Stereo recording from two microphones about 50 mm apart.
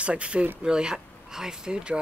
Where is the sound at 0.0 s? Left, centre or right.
Right.